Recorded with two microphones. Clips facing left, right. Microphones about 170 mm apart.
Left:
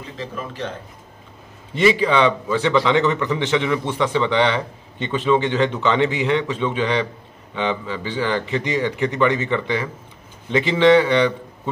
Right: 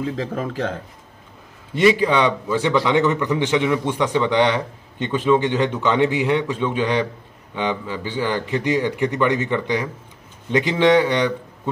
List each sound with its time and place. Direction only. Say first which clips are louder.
0.0 s speech: right 6 dB; 85° right
1.8 s a man's voice: even; 5° right (ahead or behind)
10.5 s a man's voice: left 1 dB; 10° right (ahead or behind)